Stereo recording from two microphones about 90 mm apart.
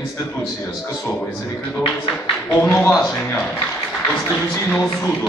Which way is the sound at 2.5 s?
15° left (ahead or behind).